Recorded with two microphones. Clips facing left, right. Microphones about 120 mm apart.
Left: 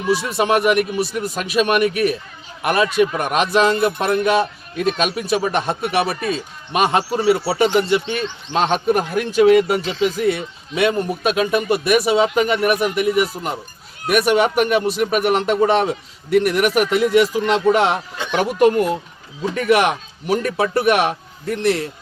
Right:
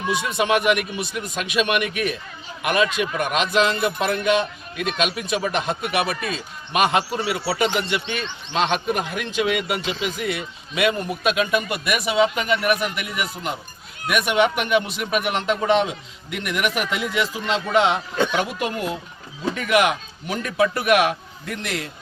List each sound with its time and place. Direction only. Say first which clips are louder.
0.1 s a man's voice: left 4 dB; 35° left (ahead or behind); by 18.7 s 50° left (ahead or behind)
19.5 s speech: left 4 dB; 40° left (ahead or behind)